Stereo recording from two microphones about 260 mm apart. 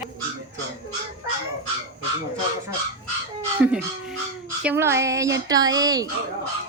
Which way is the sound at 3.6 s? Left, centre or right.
Centre.